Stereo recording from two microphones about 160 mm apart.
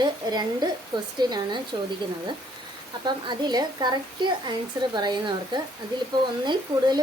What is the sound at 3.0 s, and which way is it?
Speech, 25° right (ahead or behind).